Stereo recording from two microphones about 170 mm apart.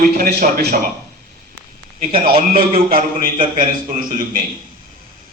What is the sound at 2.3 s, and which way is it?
A man's voice, 30° right (ahead or behind).